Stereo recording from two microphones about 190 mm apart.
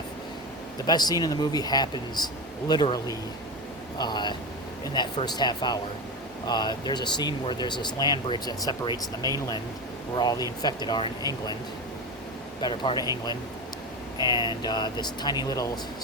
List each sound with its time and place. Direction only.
0.9 s speech: 20° left (ahead or behind)
10.2 s speech: 20° left (ahead or behind)
12.6 s speech: 25° left (ahead or behind)
14.3 s speech: 20° left (ahead or behind)